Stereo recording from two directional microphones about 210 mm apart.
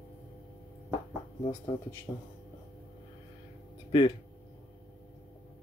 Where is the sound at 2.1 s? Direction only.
10° left (ahead or behind).